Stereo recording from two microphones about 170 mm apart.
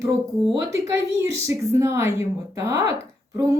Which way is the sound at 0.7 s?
20° right (ahead or behind).